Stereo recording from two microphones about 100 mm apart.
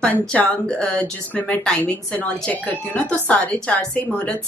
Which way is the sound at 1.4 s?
15° left (ahead or behind).